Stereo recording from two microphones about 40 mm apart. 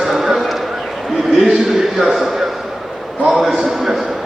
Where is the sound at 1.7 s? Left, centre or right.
Centre.